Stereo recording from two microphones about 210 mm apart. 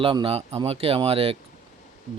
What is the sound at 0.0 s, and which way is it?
Speech, 25° right (ahead or behind).